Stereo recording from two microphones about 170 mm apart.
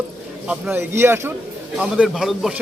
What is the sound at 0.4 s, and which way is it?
A man's voice, 10° right (ahead or behind).